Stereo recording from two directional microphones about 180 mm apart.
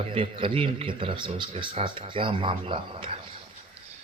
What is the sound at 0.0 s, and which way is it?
A man's voice, 30° right (ahead or behind).